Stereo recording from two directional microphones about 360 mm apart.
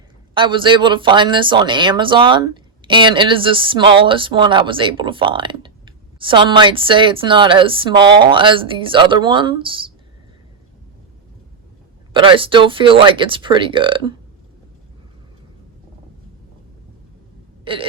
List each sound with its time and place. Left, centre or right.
0.3 s speech: centre
12.1 s speech: centre
17.7 s hiccup: centre